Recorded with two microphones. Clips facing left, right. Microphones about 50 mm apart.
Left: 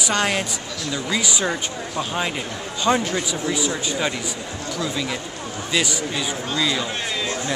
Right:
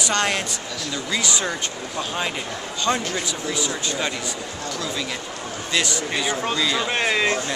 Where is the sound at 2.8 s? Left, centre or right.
Centre.